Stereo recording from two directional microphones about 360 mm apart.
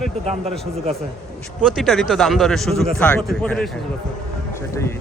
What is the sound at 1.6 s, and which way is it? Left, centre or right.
Speech, centre.